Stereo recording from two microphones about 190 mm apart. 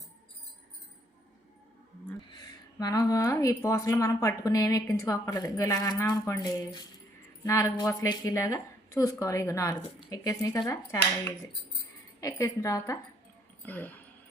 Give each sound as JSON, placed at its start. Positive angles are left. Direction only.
{"t": 2.3, "sound": "a woman's voice", "side_deg": 20}
{"t": 12.2, "sound": "a woman's voice", "side_deg": 15}